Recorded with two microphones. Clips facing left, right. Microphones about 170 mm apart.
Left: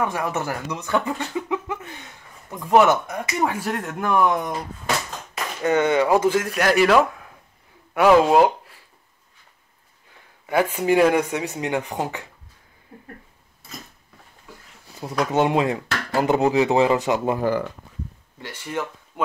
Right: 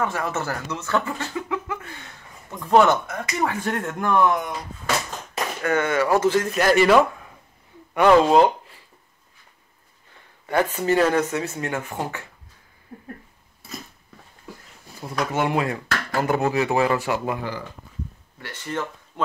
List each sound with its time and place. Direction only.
0.0 s speech: 15° left (ahead or behind)
2.5 s speech: 10° left (ahead or behind)
3.6 s speech: 5° left (ahead or behind)
5.6 s speech: 20° left (ahead or behind)
6.5 s speech: centre (ahead or behind)
10.5 s speech: 10° left (ahead or behind)
15.0 s speech: 20° left (ahead or behind)
17.4 s speech: 50° left (ahead or behind)
18.4 s speech: 10° left (ahead or behind)